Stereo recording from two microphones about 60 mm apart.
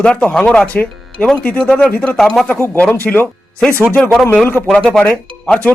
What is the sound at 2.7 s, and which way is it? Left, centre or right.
Speech, left.